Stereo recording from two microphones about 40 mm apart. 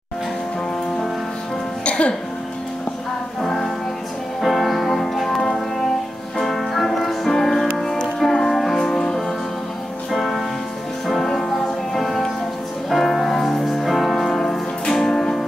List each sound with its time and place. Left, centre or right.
1.9 s music: left
3.4 s music: centre